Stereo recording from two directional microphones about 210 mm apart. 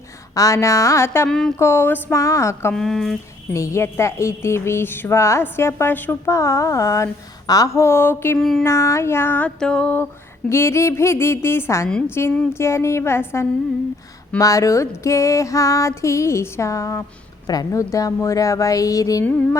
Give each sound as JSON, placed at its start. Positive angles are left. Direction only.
{"t": 0.3, "sound": "a woman's voice", "side_deg": 15}
{"t": 2.8, "sound": "speech", "side_deg": 0}
{"t": 3.5, "sound": "a woman's voice", "side_deg": 15}
{"t": 8.6, "sound": "a woman's voice", "side_deg": 15}